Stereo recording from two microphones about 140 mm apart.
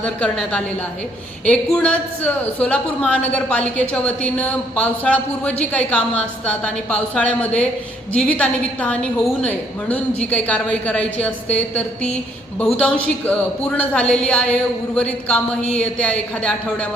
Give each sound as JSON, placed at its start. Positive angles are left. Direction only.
{"t": 0.0, "sound": "a woman's voice", "side_deg": 10}